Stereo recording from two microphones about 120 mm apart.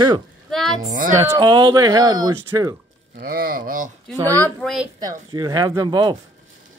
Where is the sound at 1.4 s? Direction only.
40° right (ahead or behind).